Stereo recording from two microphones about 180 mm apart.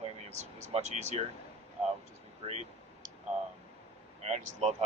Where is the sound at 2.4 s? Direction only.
40° right (ahead or behind).